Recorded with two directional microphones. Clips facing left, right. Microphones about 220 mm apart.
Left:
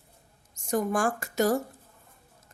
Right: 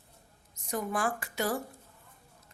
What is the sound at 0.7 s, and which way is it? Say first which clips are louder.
Speech: left 6 dB; 45° left (ahead or behind).